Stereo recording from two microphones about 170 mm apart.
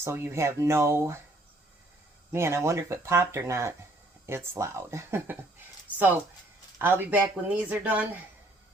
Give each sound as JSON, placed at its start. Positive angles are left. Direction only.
{"t": 0.0, "sound": "speech", "side_deg": -15}
{"t": 2.3, "sound": "speech", "side_deg": -15}
{"t": 6.7, "sound": "speech", "side_deg": -10}